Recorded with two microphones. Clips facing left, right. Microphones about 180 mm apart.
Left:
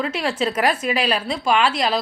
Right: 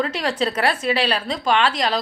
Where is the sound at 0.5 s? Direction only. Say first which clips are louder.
Even; 10° left (ahead or behind).